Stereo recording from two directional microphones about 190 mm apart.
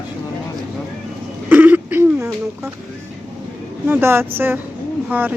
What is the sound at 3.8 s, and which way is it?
Speech, 10° right (ahead or behind).